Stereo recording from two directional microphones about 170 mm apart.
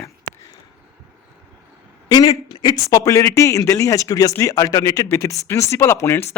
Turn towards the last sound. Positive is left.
turn(degrees=15)  # may be behind; listen again after turning